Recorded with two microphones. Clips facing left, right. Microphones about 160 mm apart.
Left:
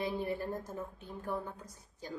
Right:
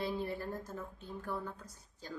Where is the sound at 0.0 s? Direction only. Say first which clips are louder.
Left 2 dB; 15° left (ahead or behind).